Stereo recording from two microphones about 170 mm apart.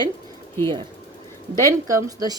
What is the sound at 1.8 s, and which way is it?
Speech, 20° right (ahead or behind).